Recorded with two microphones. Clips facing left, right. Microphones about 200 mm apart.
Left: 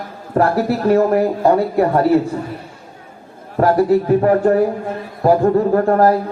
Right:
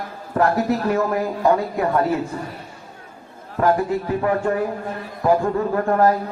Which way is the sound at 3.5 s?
35° left (ahead or behind).